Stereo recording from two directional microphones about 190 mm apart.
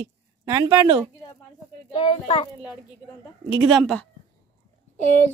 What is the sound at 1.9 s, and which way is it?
Speech, 30° left (ahead or behind).